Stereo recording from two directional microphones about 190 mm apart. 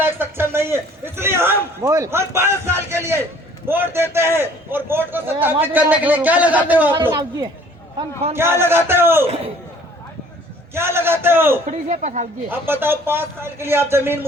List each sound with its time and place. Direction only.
0.0 s a man's voice: 10° right (ahead or behind)
7.1 s a woman's voice: 20° right (ahead or behind)
10.8 s a man's voice: 10° right (ahead or behind)
11.6 s speech: 40° right (ahead or behind)
12.5 s a man's voice: 10° right (ahead or behind)